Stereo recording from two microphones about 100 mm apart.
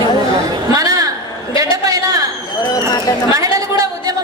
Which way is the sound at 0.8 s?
35° right (ahead or behind).